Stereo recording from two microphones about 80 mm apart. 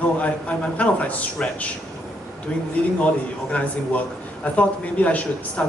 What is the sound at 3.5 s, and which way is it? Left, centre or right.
A man's voice, centre.